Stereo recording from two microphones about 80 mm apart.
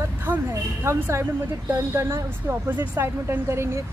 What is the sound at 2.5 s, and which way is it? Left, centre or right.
Speech, right.